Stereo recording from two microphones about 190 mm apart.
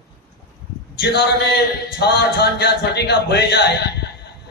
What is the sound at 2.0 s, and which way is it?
A man's voice, 60° left (ahead or behind).